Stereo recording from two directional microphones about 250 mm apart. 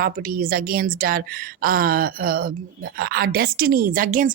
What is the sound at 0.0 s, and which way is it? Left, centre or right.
A woman's voice, right.